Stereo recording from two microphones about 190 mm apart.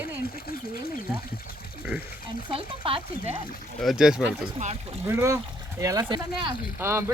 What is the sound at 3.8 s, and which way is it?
Speech, centre (ahead or behind).